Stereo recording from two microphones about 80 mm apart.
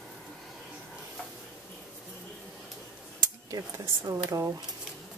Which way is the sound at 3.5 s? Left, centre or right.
Right.